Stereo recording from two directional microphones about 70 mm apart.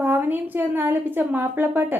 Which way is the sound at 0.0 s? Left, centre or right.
Right.